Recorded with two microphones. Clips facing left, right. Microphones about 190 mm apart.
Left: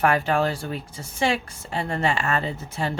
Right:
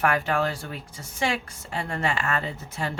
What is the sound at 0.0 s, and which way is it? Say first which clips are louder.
A woman's voice: left 3 dB; 30° left (ahead or behind).